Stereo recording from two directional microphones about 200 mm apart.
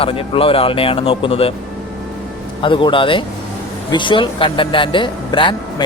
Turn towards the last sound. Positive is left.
turn(degrees=25)  # may be behind; listen again after turning